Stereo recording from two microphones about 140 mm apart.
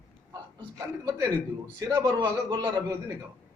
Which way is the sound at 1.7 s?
30° right (ahead or behind).